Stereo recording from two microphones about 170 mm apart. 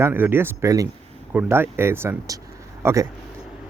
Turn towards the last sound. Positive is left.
turn(degrees=-15)  # may be behind; listen again after turning